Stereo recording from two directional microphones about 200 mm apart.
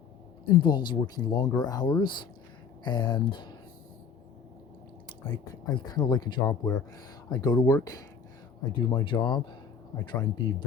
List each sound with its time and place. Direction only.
0.4 s speech: 20° left (ahead or behind)
5.2 s speech: 20° left (ahead or behind)
8.9 s speech: 25° left (ahead or behind)